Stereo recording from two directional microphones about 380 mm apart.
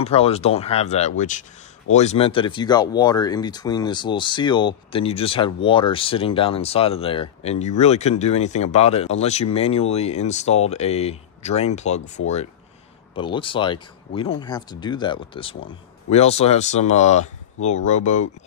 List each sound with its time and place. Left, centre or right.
0.0 s speech: centre
13.1 s speech: centre